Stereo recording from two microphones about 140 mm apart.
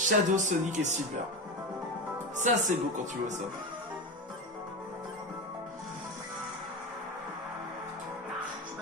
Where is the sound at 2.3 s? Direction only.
60° right (ahead or behind).